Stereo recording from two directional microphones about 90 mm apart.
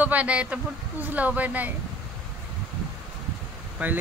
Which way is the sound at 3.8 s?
15° right (ahead or behind).